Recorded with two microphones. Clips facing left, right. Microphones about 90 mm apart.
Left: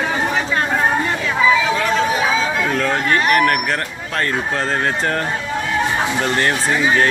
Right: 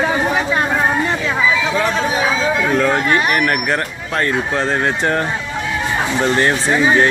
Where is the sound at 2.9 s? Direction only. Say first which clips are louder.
Right 1 dB; 10° right (ahead or behind).